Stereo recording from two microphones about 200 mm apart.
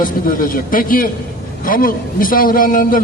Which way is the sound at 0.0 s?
45° left (ahead or behind).